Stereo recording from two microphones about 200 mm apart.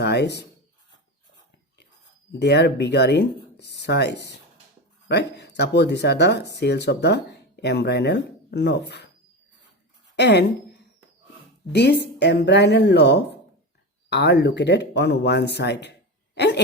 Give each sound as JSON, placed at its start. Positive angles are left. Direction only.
{"t": 0.0, "sound": "speech", "side_deg": 55}
{"t": 2.4, "sound": "speech", "side_deg": 55}
{"t": 10.2, "sound": "speech", "side_deg": 60}
{"t": 11.7, "sound": "speech", "side_deg": 55}